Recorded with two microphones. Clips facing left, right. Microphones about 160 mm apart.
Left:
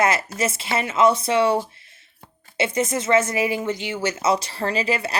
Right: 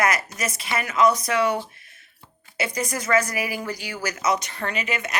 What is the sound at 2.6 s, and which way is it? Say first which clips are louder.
Speech: left 5 dB; 25° left (ahead or behind).